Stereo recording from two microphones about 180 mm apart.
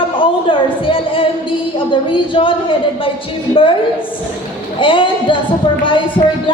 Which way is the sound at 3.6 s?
30° left (ahead or behind).